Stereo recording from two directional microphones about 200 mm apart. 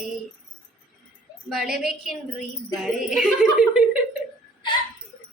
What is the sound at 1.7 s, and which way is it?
A woman's voice, centre (ahead or behind).